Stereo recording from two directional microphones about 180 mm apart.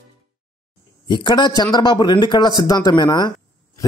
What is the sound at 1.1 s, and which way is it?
A man's voice, 25° left (ahead or behind).